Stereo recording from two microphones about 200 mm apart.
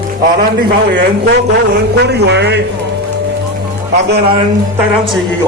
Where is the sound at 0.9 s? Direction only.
55° right (ahead or behind).